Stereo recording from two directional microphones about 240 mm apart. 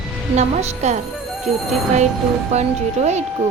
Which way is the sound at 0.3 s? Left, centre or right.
Right.